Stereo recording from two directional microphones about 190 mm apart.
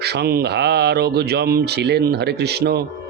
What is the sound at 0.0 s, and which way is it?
Speech, 60° right (ahead or behind).